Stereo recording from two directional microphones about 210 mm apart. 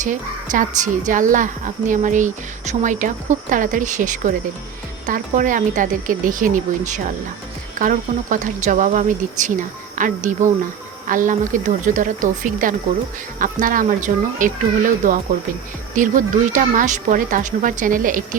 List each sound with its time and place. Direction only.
0.0 s a woman's voice: 40° right (ahead or behind)